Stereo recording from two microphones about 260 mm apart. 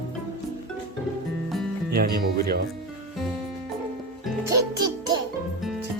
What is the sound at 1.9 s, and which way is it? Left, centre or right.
Music, right.